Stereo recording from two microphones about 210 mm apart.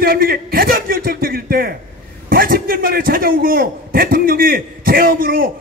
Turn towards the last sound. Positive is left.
turn(degrees=-45)  # may be behind; listen again after turning